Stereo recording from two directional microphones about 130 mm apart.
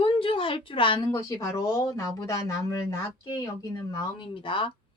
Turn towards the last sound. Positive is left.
turn(degrees=40)  # may be behind; listen again after turning